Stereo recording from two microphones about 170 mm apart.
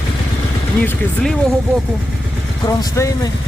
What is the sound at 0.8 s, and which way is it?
Speech, 5° left (ahead or behind).